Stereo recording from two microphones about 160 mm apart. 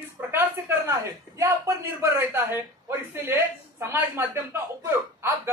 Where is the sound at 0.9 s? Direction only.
20° right (ahead or behind).